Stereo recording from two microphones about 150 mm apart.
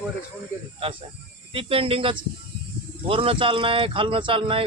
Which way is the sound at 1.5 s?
40° right (ahead or behind).